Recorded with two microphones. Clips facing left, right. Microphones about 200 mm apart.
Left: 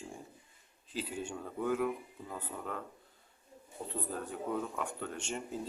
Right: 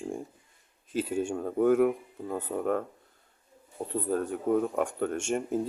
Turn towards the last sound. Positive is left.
turn(degrees=-50)  # may be behind; listen again after turning